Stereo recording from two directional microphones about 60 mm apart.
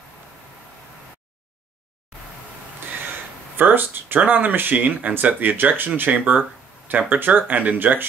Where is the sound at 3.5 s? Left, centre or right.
Right.